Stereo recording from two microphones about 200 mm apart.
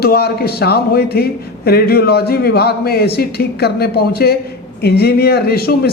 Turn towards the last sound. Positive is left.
turn(degrees=50)  # may be behind; listen again after turning